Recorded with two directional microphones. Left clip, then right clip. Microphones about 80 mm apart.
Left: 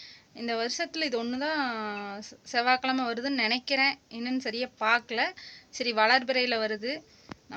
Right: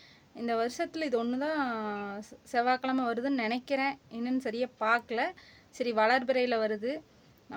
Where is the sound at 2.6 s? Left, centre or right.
Right.